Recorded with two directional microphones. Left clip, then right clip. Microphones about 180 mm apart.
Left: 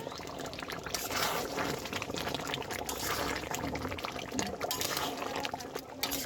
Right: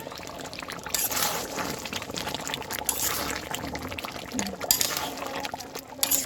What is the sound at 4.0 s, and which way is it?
Liquid, 10° right (ahead or behind).